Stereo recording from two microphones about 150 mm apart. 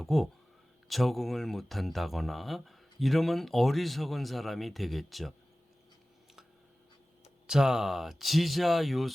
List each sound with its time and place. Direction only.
0.0 s speech: centre (ahead or behind)
7.4 s speech: 5° right (ahead or behind)